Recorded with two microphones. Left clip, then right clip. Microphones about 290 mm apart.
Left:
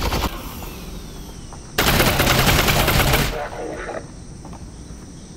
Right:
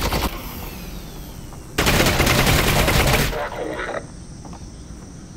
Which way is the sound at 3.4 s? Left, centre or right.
Centre.